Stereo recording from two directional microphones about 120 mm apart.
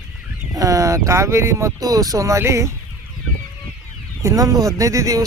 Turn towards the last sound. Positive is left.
turn(degrees=-30)  # may be behind; listen again after turning